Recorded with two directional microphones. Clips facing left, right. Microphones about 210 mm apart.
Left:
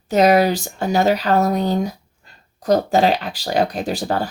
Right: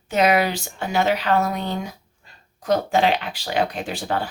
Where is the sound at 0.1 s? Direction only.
40° left (ahead or behind).